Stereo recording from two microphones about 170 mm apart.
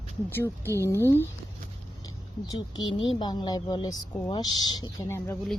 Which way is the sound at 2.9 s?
30° left (ahead or behind).